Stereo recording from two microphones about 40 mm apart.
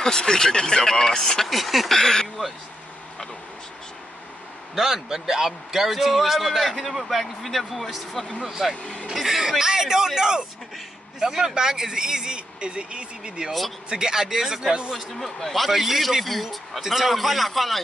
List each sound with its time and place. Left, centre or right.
0.0 s speech: centre
1.5 s a man's voice: centre
1.9 s speech: centre
4.7 s a man's voice: centre
15.1 s a man's voice: centre